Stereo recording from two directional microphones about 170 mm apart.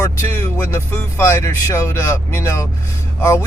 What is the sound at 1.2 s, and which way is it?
Speech, 15° left (ahead or behind).